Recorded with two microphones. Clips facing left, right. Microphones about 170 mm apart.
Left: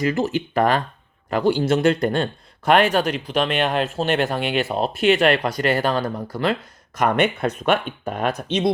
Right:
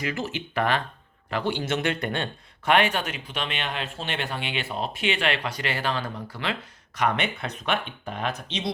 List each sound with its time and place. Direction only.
0.0 s speech: 40° left (ahead or behind)